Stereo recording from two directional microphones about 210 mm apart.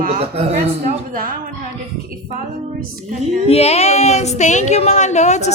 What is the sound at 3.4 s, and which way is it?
Speech, 30° left (ahead or behind).